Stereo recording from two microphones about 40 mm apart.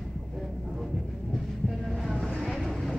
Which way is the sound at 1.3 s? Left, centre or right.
Centre.